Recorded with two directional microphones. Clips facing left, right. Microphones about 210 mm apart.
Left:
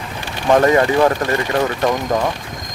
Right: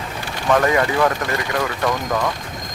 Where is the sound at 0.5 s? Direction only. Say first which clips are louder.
Left 4 dB; 30° left (ahead or behind).